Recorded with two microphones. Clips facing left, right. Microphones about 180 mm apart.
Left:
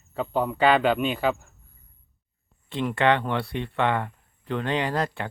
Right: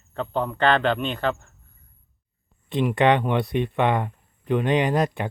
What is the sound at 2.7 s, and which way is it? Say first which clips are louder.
Speech: right 3 dB; 20° right (ahead or behind).